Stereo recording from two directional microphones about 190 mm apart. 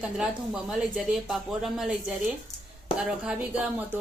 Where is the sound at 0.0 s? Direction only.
5° right (ahead or behind).